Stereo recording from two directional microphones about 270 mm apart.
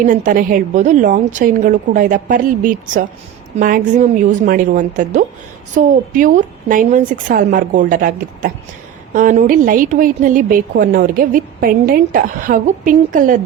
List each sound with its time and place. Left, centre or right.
0.0 s a woman's voice: right